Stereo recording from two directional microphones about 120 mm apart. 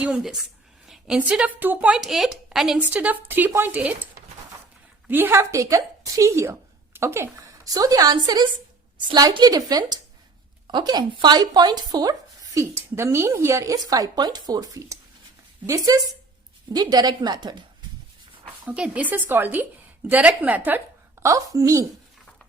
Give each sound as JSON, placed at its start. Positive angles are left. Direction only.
{"t": 0.0, "sound": "a woman's voice", "side_deg": -5}
{"t": 18.6, "sound": "a woman's voice", "side_deg": -10}